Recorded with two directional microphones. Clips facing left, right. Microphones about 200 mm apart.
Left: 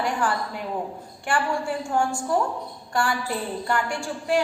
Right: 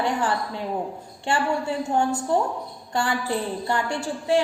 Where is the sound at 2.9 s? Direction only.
20° right (ahead or behind).